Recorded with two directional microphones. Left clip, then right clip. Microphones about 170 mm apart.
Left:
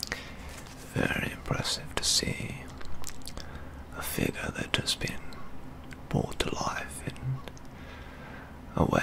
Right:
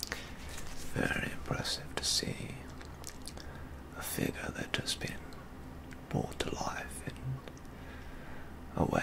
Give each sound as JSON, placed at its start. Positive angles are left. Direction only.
{"t": 0.9, "sound": "speech", "side_deg": 25}
{"t": 3.9, "sound": "speech", "side_deg": 30}
{"t": 8.7, "sound": "speech", "side_deg": 35}